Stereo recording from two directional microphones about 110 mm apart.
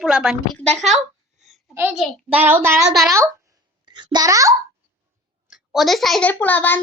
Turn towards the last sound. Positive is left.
turn(degrees=15)  # may be behind; listen again after turning